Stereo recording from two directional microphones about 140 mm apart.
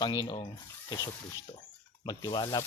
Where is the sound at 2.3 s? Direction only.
30° left (ahead or behind).